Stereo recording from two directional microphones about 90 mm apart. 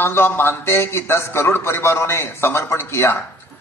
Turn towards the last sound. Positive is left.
turn(degrees=25)  # may be behind; listen again after turning